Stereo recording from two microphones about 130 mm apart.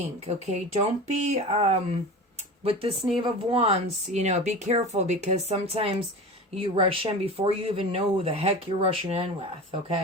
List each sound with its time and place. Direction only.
0.3 s speech: 55° right (ahead or behind)